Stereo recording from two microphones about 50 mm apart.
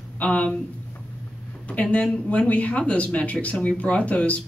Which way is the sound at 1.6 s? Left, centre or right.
Left.